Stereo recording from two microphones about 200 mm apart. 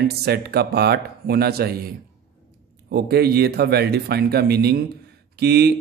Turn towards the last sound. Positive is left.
turn(degrees=-55)  # may be behind; listen again after turning